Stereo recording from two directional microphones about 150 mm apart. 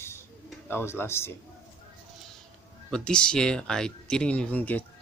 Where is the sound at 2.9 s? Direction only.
5° left (ahead or behind).